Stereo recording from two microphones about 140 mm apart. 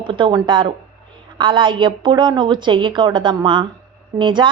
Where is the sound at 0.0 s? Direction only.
35° right (ahead or behind).